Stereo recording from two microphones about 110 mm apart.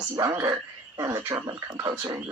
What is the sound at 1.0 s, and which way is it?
Speech, 25° right (ahead or behind).